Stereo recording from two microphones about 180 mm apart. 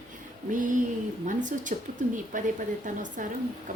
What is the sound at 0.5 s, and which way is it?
Speech, 45° right (ahead or behind).